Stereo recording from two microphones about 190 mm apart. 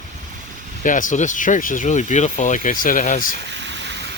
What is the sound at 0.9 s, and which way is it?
Speech, 45° left (ahead or behind).